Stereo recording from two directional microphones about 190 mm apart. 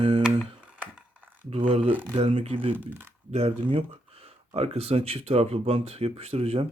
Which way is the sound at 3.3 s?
30° right (ahead or behind).